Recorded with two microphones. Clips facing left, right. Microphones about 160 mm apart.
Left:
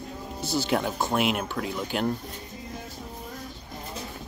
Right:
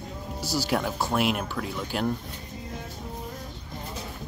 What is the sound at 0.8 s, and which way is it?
Speech, 20° left (ahead or behind).